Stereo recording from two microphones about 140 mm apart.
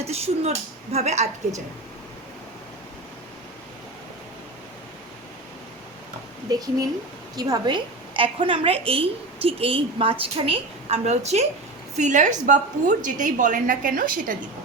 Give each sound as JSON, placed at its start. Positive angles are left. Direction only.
{"t": 0.0, "sound": "a woman's voice", "side_deg": -50}
{"t": 6.5, "sound": "a woman's voice", "side_deg": -25}